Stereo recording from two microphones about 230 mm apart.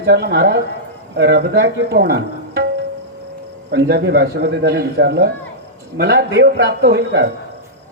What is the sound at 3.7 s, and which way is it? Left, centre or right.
A woman's voice, right.